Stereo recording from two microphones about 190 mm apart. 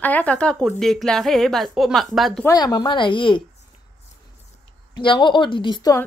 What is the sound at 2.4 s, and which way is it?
Speech, 20° left (ahead or behind).